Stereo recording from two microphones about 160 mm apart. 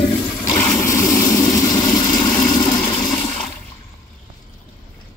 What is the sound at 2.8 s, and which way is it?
Toilet flush, 25° left (ahead or behind).